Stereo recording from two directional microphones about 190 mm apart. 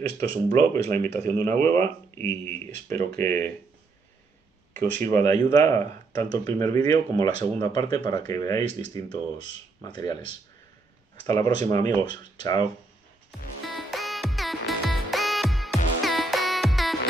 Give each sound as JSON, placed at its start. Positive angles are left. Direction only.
{"t": 0.2, "sound": "speech", "side_deg": 15}
{"t": 4.9, "sound": "speech", "side_deg": 15}
{"t": 11.2, "sound": "speech", "side_deg": 15}
{"t": 13.7, "sound": "music", "side_deg": 0}